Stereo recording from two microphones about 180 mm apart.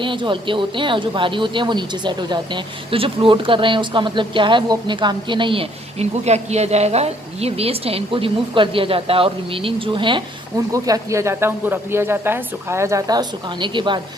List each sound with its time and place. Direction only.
0.0 s speech: 25° right (ahead or behind)